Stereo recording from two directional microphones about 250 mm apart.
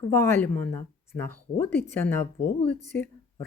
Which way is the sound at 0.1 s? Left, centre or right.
Centre.